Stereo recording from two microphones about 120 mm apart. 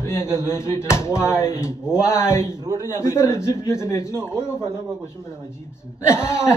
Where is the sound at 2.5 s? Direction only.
30° right (ahead or behind).